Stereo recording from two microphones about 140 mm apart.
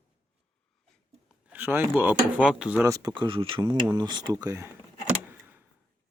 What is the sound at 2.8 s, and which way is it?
Speech, 25° right (ahead or behind).